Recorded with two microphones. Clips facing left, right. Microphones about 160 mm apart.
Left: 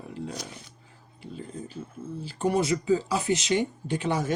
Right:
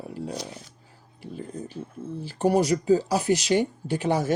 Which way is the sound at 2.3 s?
40° right (ahead or behind).